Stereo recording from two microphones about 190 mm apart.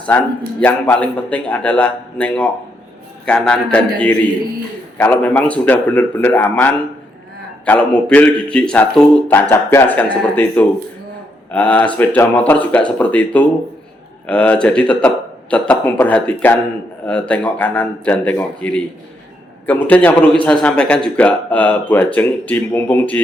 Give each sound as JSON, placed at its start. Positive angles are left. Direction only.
{"t": 0.0, "sound": "a man's voice", "side_deg": 5}